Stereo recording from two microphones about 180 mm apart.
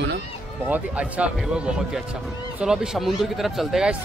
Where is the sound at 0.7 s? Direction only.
10° right (ahead or behind).